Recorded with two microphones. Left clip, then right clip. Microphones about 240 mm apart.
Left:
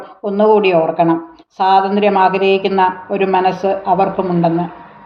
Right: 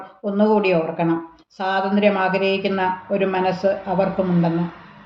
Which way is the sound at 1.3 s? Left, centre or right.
Centre.